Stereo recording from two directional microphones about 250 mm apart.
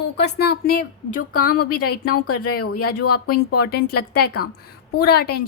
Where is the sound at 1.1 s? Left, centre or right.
Left.